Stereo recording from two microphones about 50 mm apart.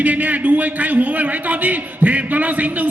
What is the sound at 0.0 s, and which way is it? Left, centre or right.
A man's voice, right.